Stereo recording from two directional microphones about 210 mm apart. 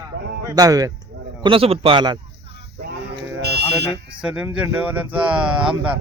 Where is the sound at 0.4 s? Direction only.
15° right (ahead or behind).